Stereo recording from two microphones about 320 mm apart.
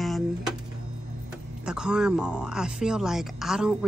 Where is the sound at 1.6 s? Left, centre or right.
Centre.